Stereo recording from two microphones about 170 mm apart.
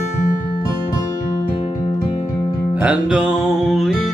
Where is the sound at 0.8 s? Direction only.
20° left (ahead or behind).